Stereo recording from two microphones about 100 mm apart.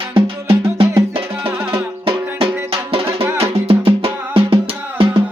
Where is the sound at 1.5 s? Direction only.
25° right (ahead or behind).